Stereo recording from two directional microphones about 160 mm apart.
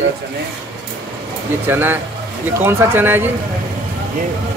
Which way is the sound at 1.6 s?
15° right (ahead or behind).